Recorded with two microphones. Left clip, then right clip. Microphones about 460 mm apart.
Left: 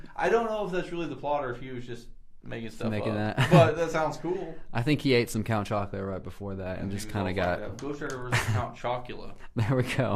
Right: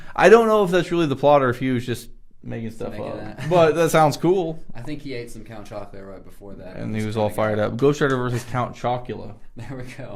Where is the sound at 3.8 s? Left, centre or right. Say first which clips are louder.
Right 11 dB; right.